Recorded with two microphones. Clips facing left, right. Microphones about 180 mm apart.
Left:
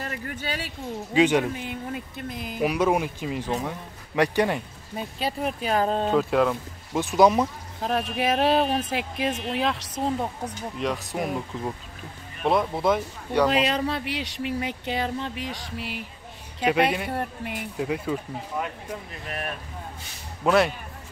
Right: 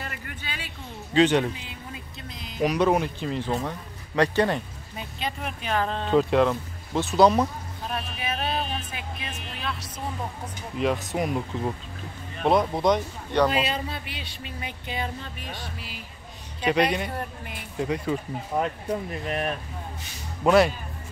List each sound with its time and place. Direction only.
0.0 s speech: 40° left (ahead or behind)
1.1 s speech: 10° left (ahead or behind)
1.5 s speech: 55° left (ahead or behind)
2.6 s speech: 10° left (ahead or behind)
4.9 s speech: 35° left (ahead or behind)
6.1 s speech: 5° left (ahead or behind)
7.8 s speech: 80° left
10.8 s speech: centre (ahead or behind)
13.5 s a sound: 75° left (ahead or behind)
16.6 s speech: 5° left (ahead or behind)
18.6 s speech: 35° right (ahead or behind)
20.4 s speech: centre (ahead or behind)